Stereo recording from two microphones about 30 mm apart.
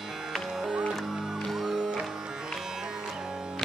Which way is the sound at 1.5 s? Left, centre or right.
Centre.